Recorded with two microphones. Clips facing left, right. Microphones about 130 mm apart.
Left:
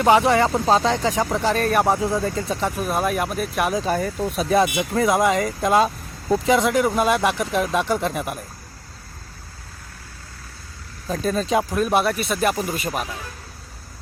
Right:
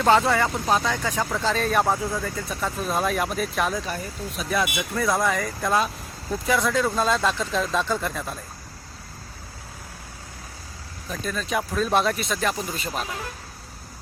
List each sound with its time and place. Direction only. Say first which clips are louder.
0.0 s speech: left 3 dB; 15° left (ahead or behind)
3.8 s speech: left 9 dB; 50° left (ahead or behind)
4.4 s speech: left 6 dB; 30° left (ahead or behind)
11.1 s speech: left 7 dB; 35° left (ahead or behind)
11.7 s speech: left 2 dB; 10° left (ahead or behind)